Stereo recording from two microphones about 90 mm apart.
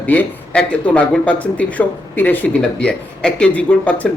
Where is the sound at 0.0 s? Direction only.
15° left (ahead or behind).